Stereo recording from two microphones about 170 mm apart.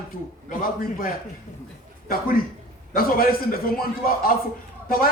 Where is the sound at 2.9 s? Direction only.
60° left (ahead or behind).